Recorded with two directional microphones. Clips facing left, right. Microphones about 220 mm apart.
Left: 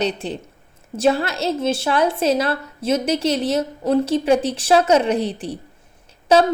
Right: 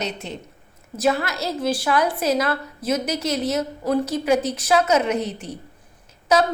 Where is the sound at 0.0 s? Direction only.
35° left (ahead or behind).